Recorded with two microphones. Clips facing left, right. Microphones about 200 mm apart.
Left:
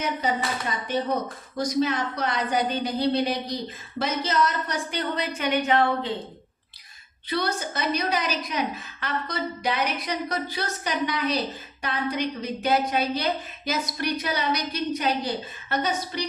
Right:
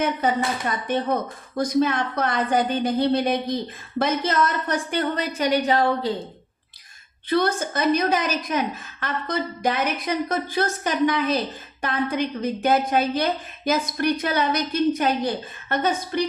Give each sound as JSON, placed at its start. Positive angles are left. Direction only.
{"t": 1.5, "sound": "a woman's voice", "side_deg": -55}
{"t": 7.3, "sound": "a woman's voice", "side_deg": -50}